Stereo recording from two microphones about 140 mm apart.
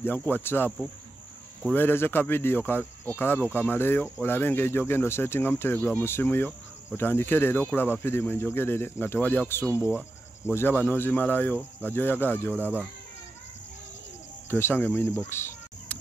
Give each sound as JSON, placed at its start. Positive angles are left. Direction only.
{"t": 0.0, "sound": "speech", "side_deg": 15}
{"t": 1.7, "sound": "speech", "side_deg": 15}
{"t": 14.5, "sound": "speech", "side_deg": 15}
{"t": 15.1, "sound": "insect", "side_deg": 15}